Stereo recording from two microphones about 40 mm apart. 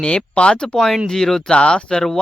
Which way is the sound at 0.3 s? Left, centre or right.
Left.